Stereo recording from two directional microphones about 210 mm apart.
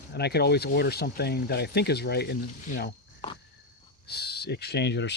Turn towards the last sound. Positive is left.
turn(degrees=55)  # may be behind; listen again after turning